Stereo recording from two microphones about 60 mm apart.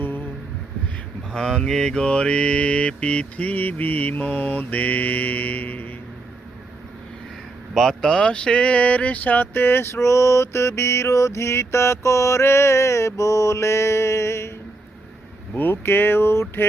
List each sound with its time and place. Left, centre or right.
1.3 s mantra: centre; by 5.9 s left
7.7 s speech: centre; by 14.5 s left
15.5 s speech: left